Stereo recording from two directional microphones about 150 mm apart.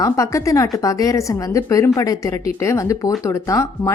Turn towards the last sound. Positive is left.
turn(degrees=20)  # may be behind; listen again after turning